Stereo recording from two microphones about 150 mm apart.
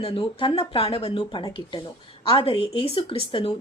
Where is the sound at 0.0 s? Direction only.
35° left (ahead or behind).